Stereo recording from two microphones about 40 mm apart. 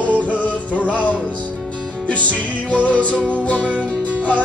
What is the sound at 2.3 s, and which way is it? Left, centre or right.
Music, left.